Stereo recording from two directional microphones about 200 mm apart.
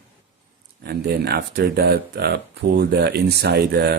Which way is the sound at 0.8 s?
55° right (ahead or behind).